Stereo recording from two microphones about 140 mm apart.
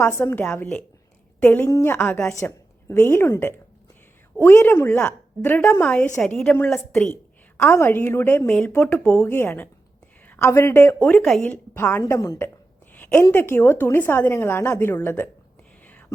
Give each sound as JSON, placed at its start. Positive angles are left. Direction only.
{"t": 0.0, "sound": "a woman's voice", "side_deg": 20}
{"t": 12.9, "sound": "a sound", "side_deg": 10}
{"t": 13.3, "sound": "a woman's voice", "side_deg": 15}
{"t": 15.9, "sound": "whispering", "side_deg": 10}